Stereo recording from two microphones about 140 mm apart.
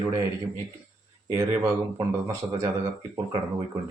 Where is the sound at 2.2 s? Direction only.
25° right (ahead or behind).